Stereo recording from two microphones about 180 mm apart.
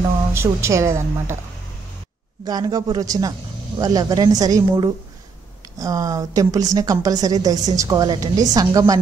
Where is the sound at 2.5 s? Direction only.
20° right (ahead or behind).